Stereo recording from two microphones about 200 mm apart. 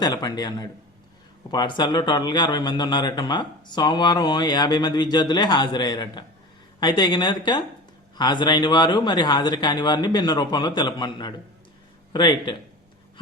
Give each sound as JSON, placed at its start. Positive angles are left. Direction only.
{"t": 0.0, "sound": "a man's voice", "side_deg": 20}